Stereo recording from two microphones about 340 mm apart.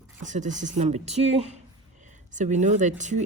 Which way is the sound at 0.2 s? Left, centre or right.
Right.